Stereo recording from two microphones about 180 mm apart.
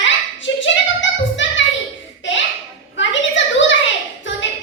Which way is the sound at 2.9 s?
90° left.